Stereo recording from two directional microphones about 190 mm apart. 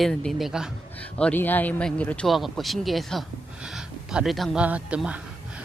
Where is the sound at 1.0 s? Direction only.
5° left (ahead or behind).